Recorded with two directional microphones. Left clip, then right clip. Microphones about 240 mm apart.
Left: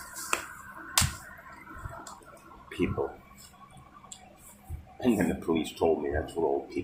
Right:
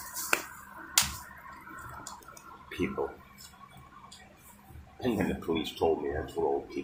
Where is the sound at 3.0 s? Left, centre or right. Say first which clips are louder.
Even; centre.